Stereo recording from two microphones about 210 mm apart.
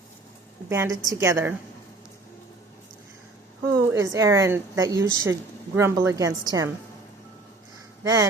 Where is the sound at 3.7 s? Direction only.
15° right (ahead or behind).